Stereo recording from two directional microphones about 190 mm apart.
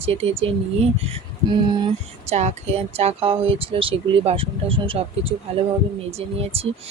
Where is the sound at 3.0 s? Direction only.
30° right (ahead or behind).